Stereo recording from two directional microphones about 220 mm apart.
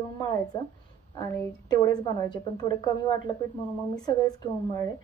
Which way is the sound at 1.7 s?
20° left (ahead or behind).